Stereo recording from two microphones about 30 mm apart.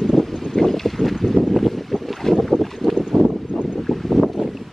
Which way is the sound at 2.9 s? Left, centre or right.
Right.